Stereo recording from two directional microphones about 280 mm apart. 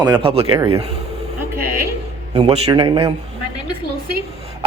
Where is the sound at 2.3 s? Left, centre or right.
Right.